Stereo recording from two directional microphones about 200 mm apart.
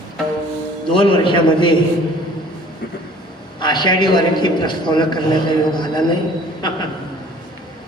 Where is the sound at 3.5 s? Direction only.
20° left (ahead or behind).